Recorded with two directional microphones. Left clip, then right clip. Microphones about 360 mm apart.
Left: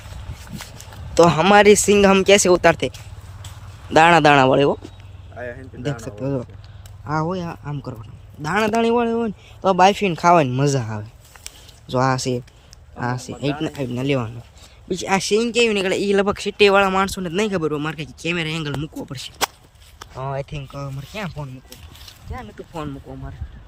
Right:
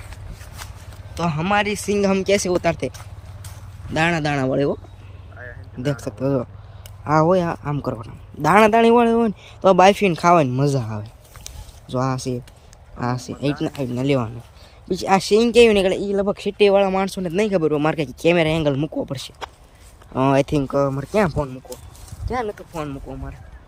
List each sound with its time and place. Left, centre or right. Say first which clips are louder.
1.1 s speech: left 8 dB; centre
3.9 s speech: left 9 dB; centre
5.8 s speech: right 3 dB; centre
11.4 s a sound: left 3 dB; centre
13.0 s speech: even; centre
20.5 s speech: right 14 dB; centre
22.7 s speech: right 2 dB; centre